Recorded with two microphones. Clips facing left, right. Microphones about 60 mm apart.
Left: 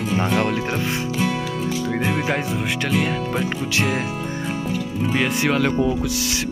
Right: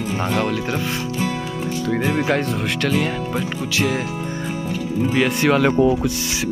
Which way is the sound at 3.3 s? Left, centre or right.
Left.